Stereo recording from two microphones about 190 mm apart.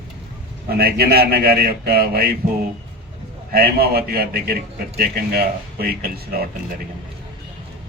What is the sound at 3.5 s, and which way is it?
A man's voice, 55° right (ahead or behind).